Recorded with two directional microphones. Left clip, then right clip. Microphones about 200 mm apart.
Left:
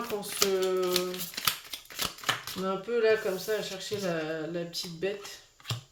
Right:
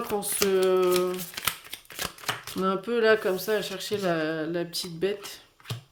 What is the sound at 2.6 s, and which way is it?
Speech, 55° right (ahead or behind).